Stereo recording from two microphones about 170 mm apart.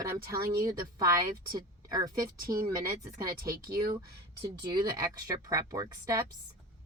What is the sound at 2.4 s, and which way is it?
Speech, 55° right (ahead or behind).